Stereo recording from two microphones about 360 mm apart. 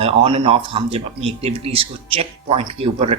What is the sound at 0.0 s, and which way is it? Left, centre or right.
Speech, centre.